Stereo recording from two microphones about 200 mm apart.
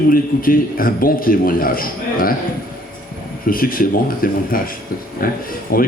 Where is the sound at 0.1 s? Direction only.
45° left (ahead or behind).